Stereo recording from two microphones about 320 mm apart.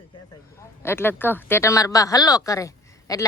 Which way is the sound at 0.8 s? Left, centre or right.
Centre.